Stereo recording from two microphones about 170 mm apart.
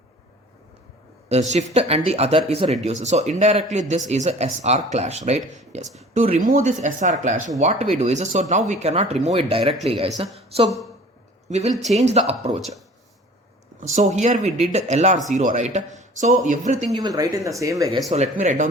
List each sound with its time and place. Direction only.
1.3 s speech: 40° right (ahead or behind)
6.4 s speech: 50° right (ahead or behind)
11.7 s speech: centre (ahead or behind)
11.9 s speech: 40° right (ahead or behind)
13.8 s speech: 45° right (ahead or behind)
17.0 s speech: 20° right (ahead or behind)
18.1 s speech: 45° right (ahead or behind)